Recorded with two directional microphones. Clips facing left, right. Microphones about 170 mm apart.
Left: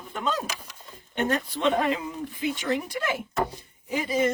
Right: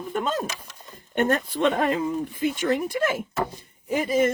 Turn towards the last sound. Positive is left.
turn(degrees=-50)  # may be behind; listen again after turning